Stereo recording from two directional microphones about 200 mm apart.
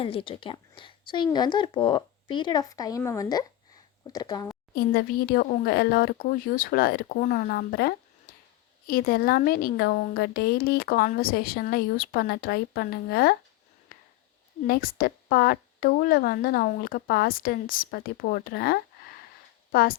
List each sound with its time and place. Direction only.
0.0 s speech: 25° left (ahead or behind)
4.7 s a woman's voice: 50° left (ahead or behind)
8.3 s a sound: 45° left (ahead or behind)
8.9 s a woman's voice: 45° left (ahead or behind)
13.9 s a sound: 45° left (ahead or behind)
14.7 s a woman's voice: 45° left (ahead or behind)